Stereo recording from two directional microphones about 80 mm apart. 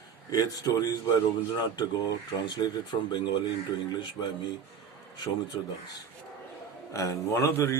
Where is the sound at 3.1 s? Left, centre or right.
Left.